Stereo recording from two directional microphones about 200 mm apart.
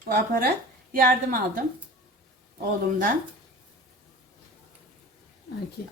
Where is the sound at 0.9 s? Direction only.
45° right (ahead or behind).